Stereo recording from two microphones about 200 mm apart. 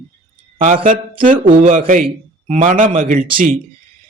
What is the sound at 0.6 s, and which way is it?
A man's voice, 40° right (ahead or behind).